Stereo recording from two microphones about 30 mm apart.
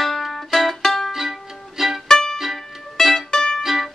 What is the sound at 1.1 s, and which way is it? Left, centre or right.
Music, centre.